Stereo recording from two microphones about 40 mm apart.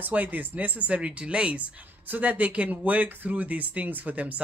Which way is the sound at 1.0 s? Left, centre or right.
Right.